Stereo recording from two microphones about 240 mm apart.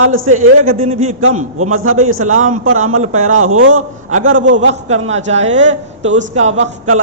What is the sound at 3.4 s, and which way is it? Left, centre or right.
Speech, right.